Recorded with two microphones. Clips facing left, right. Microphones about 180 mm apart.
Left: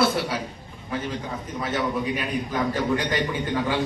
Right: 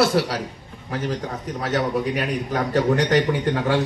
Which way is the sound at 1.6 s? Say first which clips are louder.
Right 3 dB; 75° right (ahead or behind).